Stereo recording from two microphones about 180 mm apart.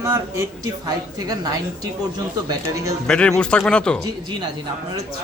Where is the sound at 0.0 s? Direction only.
15° right (ahead or behind).